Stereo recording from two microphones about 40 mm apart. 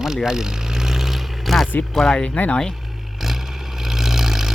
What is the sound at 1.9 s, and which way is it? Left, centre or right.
Speech, centre.